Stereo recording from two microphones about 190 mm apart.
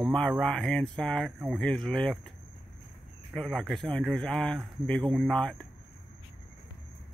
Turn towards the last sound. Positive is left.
turn(degrees=5)  # may be behind; listen again after turning